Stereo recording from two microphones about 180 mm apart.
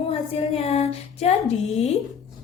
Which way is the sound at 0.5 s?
35° left (ahead or behind).